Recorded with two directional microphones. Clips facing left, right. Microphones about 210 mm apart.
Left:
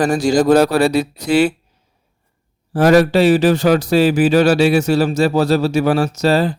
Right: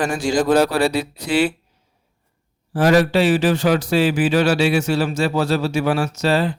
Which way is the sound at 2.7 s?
45° left (ahead or behind).